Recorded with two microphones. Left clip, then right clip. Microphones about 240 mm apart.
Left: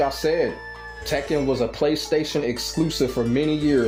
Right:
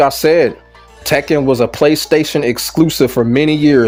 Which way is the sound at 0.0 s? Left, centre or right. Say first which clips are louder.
Right 11 dB; right.